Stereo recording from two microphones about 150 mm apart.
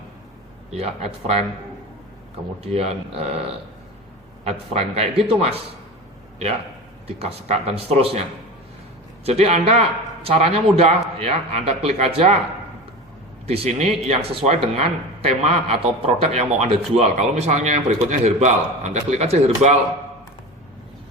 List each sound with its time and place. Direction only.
0.8 s a man's voice: 45° right (ahead or behind)
2.6 s a man's voice: 45° right (ahead or behind)
4.4 s a man's voice: 45° right (ahead or behind)
7.2 s a man's voice: 45° right (ahead or behind)
9.2 s a man's voice: 40° right (ahead or behind)
13.5 s a man's voice: 45° right (ahead or behind)